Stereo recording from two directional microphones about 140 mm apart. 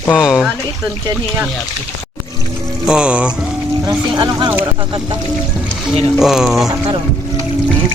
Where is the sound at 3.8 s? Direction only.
35° right (ahead or behind).